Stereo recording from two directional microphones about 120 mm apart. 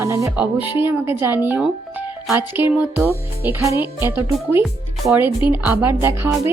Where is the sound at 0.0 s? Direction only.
25° right (ahead or behind).